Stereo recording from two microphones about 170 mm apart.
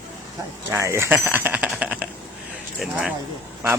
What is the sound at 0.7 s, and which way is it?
Speech, 15° right (ahead or behind).